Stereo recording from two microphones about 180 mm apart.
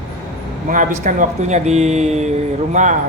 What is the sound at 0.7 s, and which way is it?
A man's voice, 45° right (ahead or behind).